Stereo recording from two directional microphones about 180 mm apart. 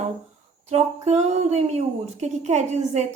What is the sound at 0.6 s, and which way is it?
A woman's voice, 35° right (ahead or behind).